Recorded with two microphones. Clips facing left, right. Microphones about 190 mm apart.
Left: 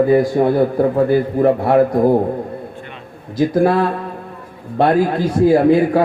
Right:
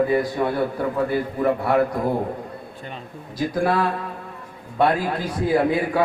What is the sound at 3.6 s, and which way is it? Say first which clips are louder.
A man's voice: left 6 dB; 50° left (ahead or behind).